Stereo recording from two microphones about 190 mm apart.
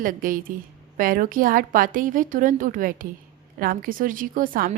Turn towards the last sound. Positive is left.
turn(degrees=-50)  # may be behind; listen again after turning